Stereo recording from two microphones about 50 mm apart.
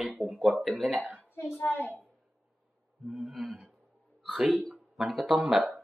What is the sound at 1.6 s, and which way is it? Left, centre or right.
Speech, left.